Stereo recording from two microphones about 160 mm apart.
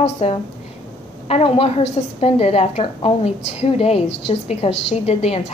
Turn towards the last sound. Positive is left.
turn(degrees=40)  # may be behind; listen again after turning